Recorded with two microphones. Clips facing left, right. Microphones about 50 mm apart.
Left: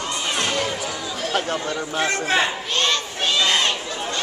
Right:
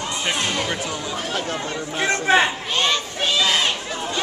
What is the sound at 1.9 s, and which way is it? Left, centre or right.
A man's voice, centre.